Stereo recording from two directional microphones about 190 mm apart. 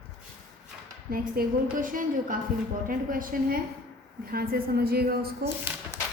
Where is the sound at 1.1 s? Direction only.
45° right (ahead or behind).